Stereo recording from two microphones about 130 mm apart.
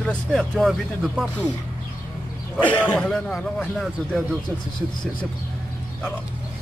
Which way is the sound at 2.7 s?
10° left (ahead or behind).